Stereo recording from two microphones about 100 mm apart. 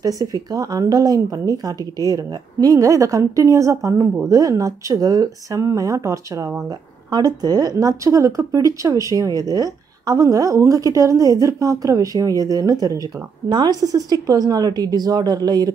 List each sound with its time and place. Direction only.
0.0 s speech: 40° right (ahead or behind)